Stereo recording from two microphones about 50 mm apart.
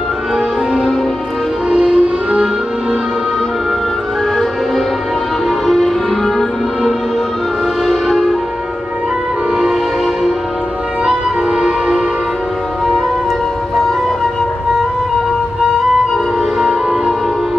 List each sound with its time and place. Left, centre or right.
1.7 s music: centre
5.7 s music: centre
7.8 s music: centre